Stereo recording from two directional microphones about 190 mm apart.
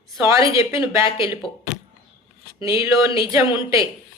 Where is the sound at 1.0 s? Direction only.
30° left (ahead or behind).